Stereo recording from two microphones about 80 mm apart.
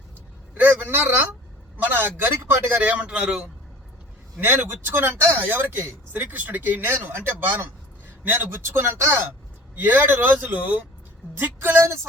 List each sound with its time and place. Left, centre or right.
0.5 s a sound: right
1.7 s speech: right
4.4 s speech: right